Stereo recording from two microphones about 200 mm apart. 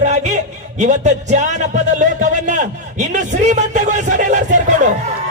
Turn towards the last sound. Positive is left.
turn(degrees=-40)  # may be behind; listen again after turning